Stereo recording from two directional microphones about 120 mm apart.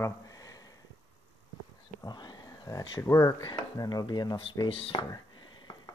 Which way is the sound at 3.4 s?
35° left (ahead or behind).